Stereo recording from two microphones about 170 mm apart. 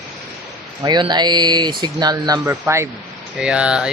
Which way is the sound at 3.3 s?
5° right (ahead or behind).